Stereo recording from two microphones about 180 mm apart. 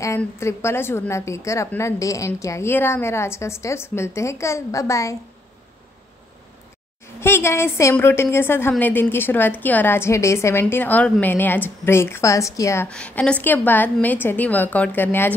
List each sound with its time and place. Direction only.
0.0 s a woman's voice: 15° left (ahead or behind)
7.2 s a woman's voice: 15° left (ahead or behind)
12.8 s a woman's voice: 5° left (ahead or behind)